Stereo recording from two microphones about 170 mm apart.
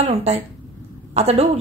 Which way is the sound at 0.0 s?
40° right (ahead or behind).